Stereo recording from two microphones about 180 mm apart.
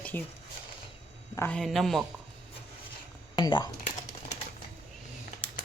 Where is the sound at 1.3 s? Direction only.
15° left (ahead or behind).